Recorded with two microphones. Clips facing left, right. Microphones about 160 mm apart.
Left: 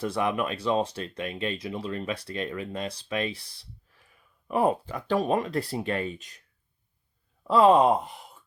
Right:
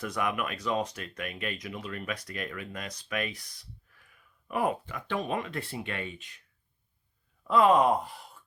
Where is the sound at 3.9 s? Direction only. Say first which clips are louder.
Left 2 dB; 30° left (ahead or behind).